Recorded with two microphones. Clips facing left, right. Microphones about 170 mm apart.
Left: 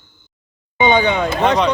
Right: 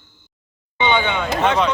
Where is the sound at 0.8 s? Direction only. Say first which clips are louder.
Left 5 dB; 40° left (ahead or behind).